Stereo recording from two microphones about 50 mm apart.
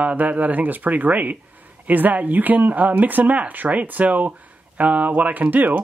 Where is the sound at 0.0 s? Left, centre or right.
Right.